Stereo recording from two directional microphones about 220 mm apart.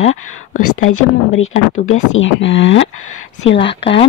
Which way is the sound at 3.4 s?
25° left (ahead or behind).